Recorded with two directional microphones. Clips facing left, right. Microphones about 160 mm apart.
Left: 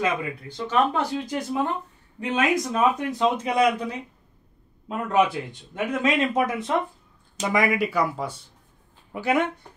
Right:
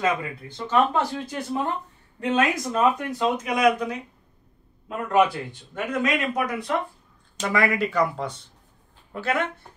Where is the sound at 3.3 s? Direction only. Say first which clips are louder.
Even; 30° left (ahead or behind).